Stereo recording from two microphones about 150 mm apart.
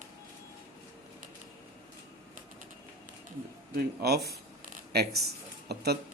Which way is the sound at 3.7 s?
90° right.